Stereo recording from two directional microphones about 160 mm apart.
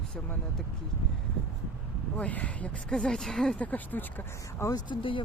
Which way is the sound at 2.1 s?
10° left (ahead or behind).